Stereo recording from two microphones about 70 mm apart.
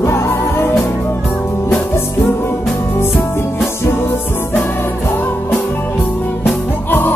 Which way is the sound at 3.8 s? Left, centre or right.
Left.